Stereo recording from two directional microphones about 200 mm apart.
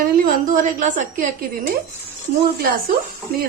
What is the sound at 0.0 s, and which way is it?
A woman's voice, 40° right (ahead or behind).